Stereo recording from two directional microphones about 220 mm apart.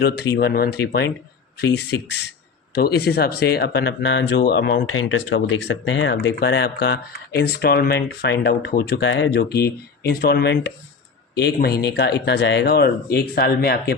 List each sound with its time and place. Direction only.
0.3 s speech: 45° left (ahead or behind)
4.9 s speech: 70° left (ahead or behind)
5.5 s speech: 55° left (ahead or behind)